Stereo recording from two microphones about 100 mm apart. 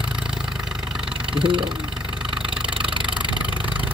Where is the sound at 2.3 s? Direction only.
10° right (ahead or behind).